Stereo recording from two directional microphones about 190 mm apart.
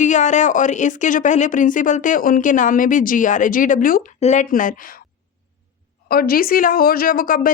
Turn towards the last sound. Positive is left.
turn(degrees=45)  # may be behind; listen again after turning